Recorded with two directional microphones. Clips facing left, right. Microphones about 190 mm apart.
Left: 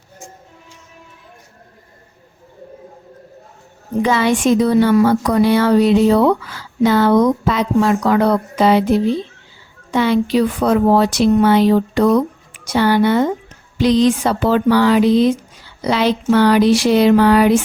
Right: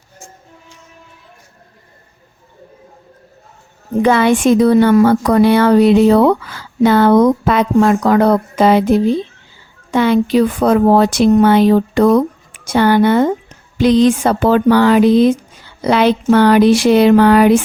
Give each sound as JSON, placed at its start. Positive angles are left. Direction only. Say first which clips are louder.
{"t": 4.0, "sound": "speech", "louder": "right 4 dB", "side_deg": -55}